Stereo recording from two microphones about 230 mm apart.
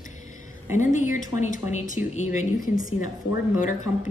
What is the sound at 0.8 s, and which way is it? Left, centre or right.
A woman's voice, left.